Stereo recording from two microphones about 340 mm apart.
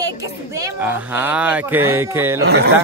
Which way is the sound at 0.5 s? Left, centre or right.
Centre.